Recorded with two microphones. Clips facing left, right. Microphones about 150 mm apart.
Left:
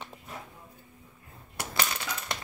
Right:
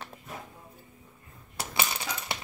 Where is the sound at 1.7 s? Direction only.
10° right (ahead or behind).